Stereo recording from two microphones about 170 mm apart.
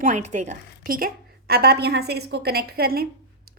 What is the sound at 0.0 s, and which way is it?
Speech, 45° right (ahead or behind).